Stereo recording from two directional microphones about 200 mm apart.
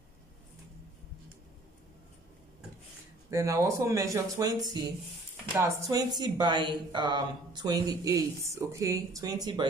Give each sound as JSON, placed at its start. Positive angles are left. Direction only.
{"t": 3.3, "sound": "speech", "side_deg": -15}